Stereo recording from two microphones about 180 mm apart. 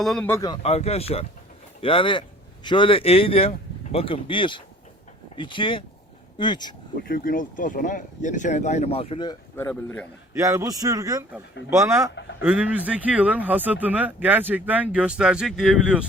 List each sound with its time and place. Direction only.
0.0 s speech: centre (ahead or behind)
0.3 s speech: 20° left (ahead or behind)
0.6 s speech: 35° left (ahead or behind)
7.1 s speech: 50° left (ahead or behind); by 9.4 s 25° left (ahead or behind)
9.6 s speech: 10° left (ahead or behind)
10.3 s a man's voice: 15° right (ahead or behind)